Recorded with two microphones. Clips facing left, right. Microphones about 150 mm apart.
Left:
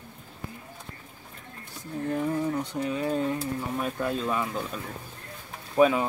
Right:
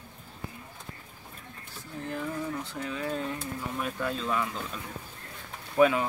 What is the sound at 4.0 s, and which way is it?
Speech, 15° left (ahead or behind).